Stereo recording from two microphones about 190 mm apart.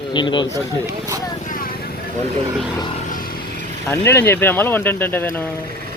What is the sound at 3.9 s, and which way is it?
Speech, 15° left (ahead or behind).